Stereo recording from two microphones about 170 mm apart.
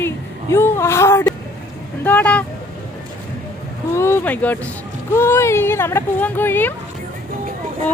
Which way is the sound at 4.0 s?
15° left (ahead or behind).